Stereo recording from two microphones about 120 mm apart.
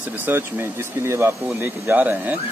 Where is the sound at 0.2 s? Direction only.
20° right (ahead or behind).